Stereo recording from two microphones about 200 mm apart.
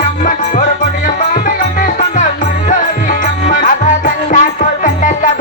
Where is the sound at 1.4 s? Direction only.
40° left (ahead or behind).